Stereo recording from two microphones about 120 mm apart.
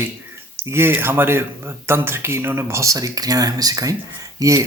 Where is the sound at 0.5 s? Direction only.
20° right (ahead or behind).